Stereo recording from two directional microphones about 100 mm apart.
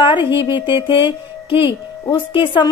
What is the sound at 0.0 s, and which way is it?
Speech, 55° left (ahead or behind).